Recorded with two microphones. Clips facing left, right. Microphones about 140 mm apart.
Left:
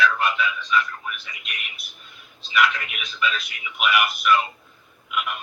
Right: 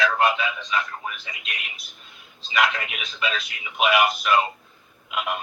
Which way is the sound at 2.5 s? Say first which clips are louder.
Left 1 dB; 35° right (ahead or behind).